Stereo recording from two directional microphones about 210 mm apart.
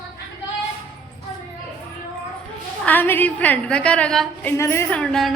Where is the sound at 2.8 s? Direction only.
10° left (ahead or behind).